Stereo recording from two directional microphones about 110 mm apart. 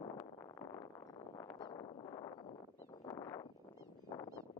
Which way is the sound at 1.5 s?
45° left (ahead or behind).